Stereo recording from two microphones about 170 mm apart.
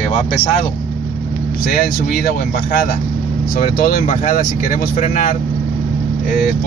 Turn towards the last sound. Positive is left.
turn(degrees=45)  # may be behind; listen again after turning